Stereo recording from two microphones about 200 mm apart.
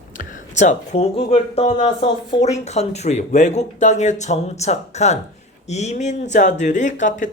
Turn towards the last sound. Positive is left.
turn(degrees=40)  # may be behind; listen again after turning